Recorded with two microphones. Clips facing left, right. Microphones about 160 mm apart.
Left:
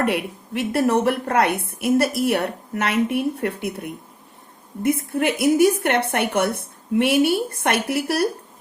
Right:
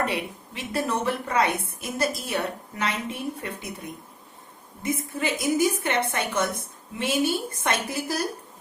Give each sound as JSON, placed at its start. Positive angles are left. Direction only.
{"t": 0.0, "sound": "a woman's voice", "side_deg": 65}